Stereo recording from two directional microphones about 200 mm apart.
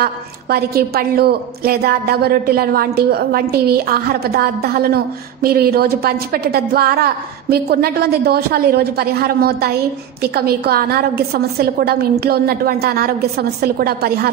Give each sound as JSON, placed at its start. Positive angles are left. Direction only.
{"t": 0.0, "sound": "a woman's voice", "side_deg": -50}